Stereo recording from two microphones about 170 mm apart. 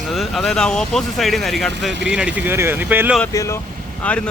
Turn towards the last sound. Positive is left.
turn(degrees=5)  # may be behind; listen again after turning